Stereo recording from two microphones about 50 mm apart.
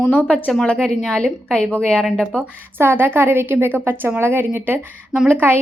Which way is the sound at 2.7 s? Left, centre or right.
Right.